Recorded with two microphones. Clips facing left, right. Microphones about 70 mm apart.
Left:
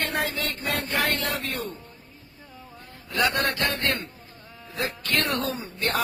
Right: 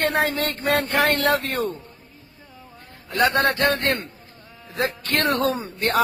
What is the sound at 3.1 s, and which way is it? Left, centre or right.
Speech, right.